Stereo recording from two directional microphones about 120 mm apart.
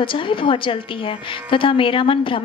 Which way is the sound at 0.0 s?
45° left (ahead or behind).